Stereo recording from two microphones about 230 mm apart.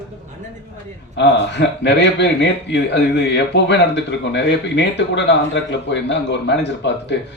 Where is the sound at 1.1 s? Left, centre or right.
Left.